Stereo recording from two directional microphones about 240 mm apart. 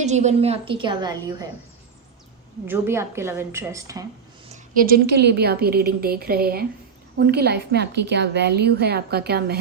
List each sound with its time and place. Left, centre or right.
0.0 s a woman's voice: right
2.6 s a woman's voice: centre
4.5 s a woman's voice: right